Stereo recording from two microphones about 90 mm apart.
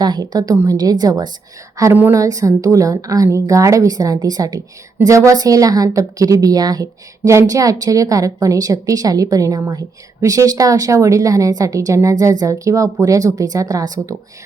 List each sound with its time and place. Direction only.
0.0 s a woman's voice: 50° right (ahead or behind)